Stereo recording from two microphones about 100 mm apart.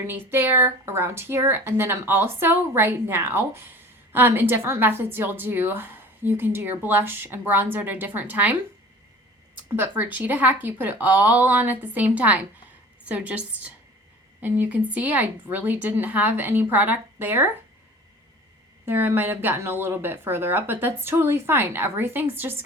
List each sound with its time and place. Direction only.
0.1 s speech: 20° right (ahead or behind)
9.6 s speech: 20° right (ahead or behind)
18.9 s speech: 20° right (ahead or behind)